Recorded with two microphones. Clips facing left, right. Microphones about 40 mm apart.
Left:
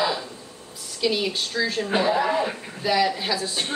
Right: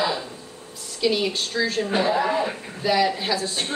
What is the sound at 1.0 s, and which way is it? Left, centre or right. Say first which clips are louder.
Speech: right 2 dB; centre.